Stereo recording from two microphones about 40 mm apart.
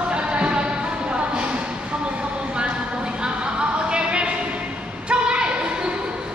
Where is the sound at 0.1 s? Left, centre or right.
Right.